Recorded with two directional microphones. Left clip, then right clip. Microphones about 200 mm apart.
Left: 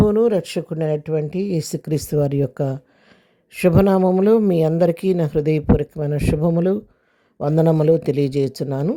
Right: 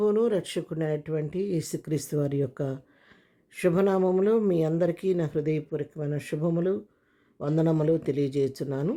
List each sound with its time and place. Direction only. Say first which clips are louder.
0.0 s speech: left 7 dB; 30° left (ahead or behind)